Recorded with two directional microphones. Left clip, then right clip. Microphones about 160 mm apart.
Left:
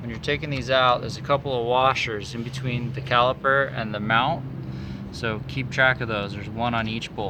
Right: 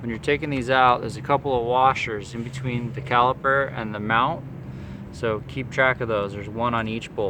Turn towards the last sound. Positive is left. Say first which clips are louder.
# right 2 dB
turn(degrees=-60)  # may be behind; listen again after turning